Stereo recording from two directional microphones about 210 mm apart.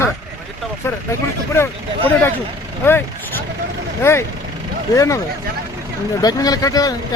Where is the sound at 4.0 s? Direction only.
10° left (ahead or behind).